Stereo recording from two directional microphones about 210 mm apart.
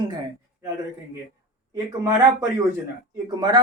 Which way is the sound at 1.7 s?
15° right (ahead or behind).